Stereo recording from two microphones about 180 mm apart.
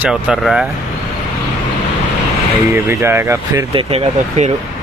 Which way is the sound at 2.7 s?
15° right (ahead or behind).